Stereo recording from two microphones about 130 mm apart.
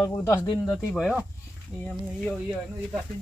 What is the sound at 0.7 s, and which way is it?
Speech, centre (ahead or behind).